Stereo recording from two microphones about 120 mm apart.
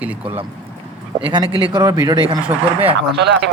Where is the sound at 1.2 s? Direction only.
45° right (ahead or behind).